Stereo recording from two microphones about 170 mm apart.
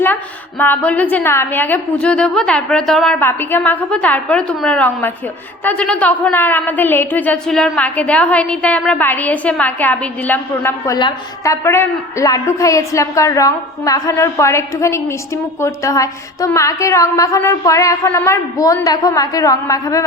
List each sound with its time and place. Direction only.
0.6 s a woman's voice: 10° left (ahead or behind)